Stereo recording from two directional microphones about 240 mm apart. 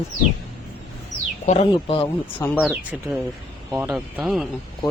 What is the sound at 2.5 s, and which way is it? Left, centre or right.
Speech, centre.